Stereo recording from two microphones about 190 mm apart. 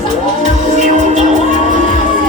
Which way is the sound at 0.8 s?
40° right (ahead or behind).